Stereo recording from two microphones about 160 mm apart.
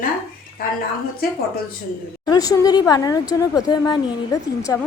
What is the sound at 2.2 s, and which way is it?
A woman's voice, 20° left (ahead or behind).